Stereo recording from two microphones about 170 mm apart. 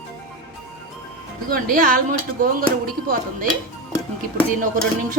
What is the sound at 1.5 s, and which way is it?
Speech, 55° right (ahead or behind).